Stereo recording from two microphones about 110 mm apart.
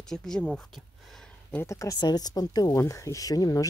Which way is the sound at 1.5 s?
25° left (ahead or behind).